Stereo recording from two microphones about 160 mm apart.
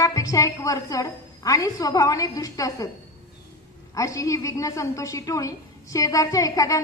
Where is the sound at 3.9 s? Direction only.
20° left (ahead or behind).